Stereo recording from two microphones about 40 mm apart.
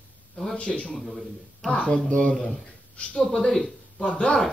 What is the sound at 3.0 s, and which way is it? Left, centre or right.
A man's voice, left.